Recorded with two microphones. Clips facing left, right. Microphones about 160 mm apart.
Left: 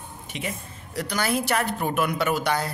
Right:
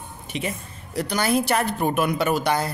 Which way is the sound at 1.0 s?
30° right (ahead or behind).